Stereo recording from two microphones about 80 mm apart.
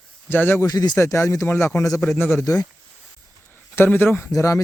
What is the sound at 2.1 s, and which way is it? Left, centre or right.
Speech, left.